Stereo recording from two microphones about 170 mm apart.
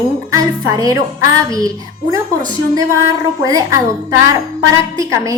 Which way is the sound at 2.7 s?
20° right (ahead or behind).